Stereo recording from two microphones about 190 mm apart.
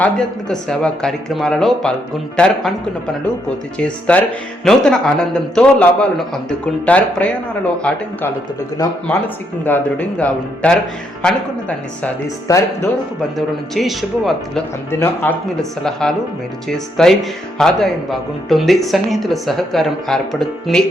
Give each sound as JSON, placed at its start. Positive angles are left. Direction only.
{"t": 0.0, "sound": "a woman's voice", "side_deg": 5}
{"t": 3.8, "sound": "a man's voice", "side_deg": 5}
{"t": 8.8, "sound": "speech", "side_deg": 20}
{"t": 9.6, "sound": "a man's voice", "side_deg": 10}
{"t": 12.0, "sound": "a man's voice", "side_deg": 15}
{"t": 13.3, "sound": "a woman's voice", "side_deg": 0}
{"t": 14.8, "sound": "a man's voice", "side_deg": 10}